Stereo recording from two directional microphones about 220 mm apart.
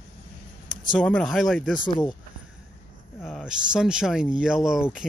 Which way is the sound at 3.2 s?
Centre (ahead or behind).